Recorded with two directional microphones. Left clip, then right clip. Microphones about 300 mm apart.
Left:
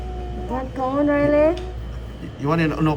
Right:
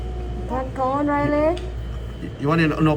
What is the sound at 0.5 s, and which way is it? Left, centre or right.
Speech, left.